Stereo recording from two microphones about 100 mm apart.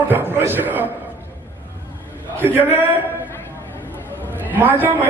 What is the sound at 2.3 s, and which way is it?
Speech, 20° right (ahead or behind).